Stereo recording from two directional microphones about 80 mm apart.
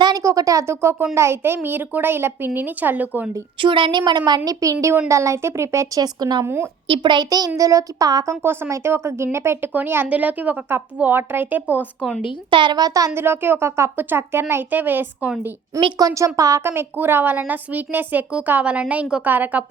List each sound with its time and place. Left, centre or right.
0.2 s a woman's voice: right
3.6 s a woman's voice: right
4.3 s speech: right
6.0 s a woman's voice: right
6.4 s a woman's voice: right
6.8 s speech: right
8.7 s a woman's voice: right
12.5 s a woman's voice: right
13.1 s a woman's voice: right
16.0 s a woman's voice: right